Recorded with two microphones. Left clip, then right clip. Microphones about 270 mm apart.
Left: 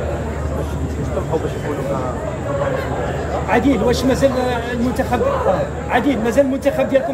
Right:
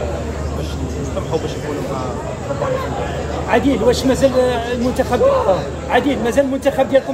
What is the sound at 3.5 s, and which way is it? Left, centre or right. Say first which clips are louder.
Speech: right 2 dB; right.